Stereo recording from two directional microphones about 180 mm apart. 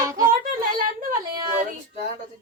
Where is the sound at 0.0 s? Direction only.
20° right (ahead or behind).